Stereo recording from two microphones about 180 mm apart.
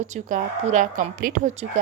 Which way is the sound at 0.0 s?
45° right (ahead or behind).